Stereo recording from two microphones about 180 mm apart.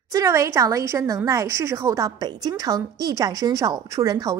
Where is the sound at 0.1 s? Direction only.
20° right (ahead or behind).